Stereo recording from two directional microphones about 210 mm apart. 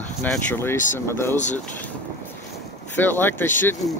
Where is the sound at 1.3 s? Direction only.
35° left (ahead or behind).